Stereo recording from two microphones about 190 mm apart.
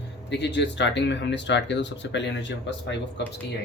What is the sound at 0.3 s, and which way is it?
Speech, 65° left (ahead or behind).